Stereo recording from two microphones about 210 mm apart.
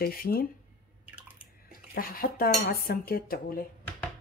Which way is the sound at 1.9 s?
45° left (ahead or behind).